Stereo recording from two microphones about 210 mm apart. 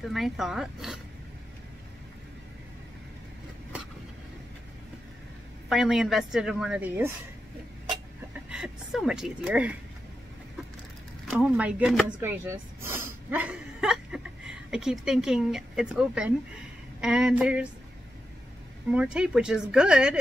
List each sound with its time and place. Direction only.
0.0 s a woman's voice: centre (ahead or behind)
5.7 s a woman's voice: centre (ahead or behind)
8.5 s a woman's voice: 5° right (ahead or behind)
11.3 s a woman's voice: 5° right (ahead or behind)
12.2 s a sound: 10° right (ahead or behind)
17.0 s a woman's voice: 5° right (ahead or behind)
18.9 s a woman's voice: 5° right (ahead or behind)